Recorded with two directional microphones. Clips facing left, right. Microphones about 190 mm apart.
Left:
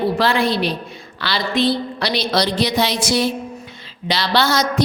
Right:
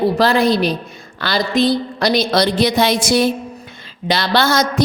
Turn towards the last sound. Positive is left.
turn(degrees=-50)  # may be behind; listen again after turning